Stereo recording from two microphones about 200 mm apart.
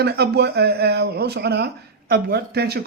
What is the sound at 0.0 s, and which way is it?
Speech, 55° right (ahead or behind).